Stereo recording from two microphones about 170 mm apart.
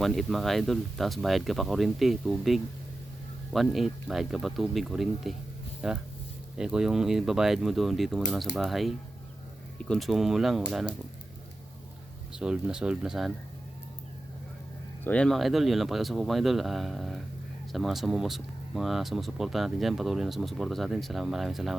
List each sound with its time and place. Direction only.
0.0 s speech: centre (ahead or behind)
12.4 s speech: 5° right (ahead or behind)
15.0 s speech: 5° left (ahead or behind)